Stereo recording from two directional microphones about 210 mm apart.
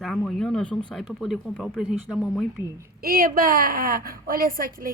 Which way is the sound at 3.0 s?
40° right (ahead or behind).